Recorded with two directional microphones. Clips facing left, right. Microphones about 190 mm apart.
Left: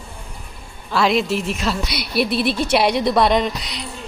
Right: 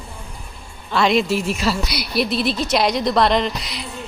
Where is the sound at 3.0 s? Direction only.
5° left (ahead or behind).